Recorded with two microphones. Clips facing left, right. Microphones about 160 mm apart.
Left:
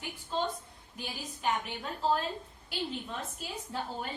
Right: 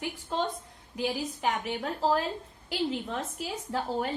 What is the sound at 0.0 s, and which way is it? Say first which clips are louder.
A woman's voice: right 3 dB; 90° right.